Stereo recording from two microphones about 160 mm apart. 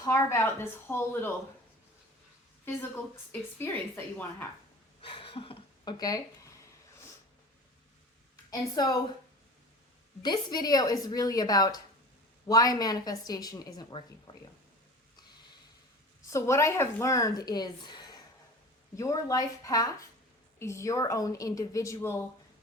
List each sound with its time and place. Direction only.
0.0 s speech: 15° left (ahead or behind)
2.6 s speech: 10° left (ahead or behind)
5.0 s speech: 35° left (ahead or behind)
8.4 s a woman's voice: 25° left (ahead or behind)
10.2 s a woman's voice: 25° left (ahead or behind)
16.3 s a woman's voice: 20° left (ahead or behind)